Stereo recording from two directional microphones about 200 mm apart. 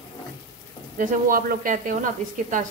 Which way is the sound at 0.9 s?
40° right (ahead or behind).